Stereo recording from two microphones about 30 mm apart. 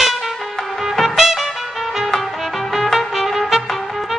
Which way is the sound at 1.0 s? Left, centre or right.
Centre.